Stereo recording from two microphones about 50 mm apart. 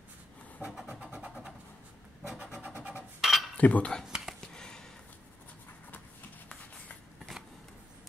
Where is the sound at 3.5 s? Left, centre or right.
Left.